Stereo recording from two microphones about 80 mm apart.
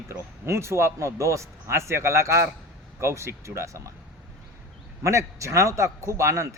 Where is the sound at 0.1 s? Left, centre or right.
Right.